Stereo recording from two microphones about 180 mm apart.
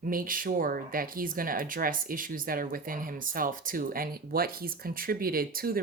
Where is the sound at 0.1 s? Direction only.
50° right (ahead or behind).